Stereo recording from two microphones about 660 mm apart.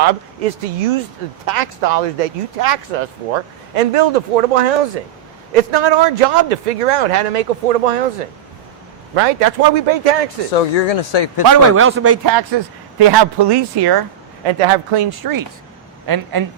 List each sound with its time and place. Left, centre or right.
0.0 s speech: right
6.1 s speech: right
9.1 s speech: right
10.5 s speech: left
11.1 s speech: left
11.8 s a man's voice: centre; by 14.0 s right
14.4 s speech: right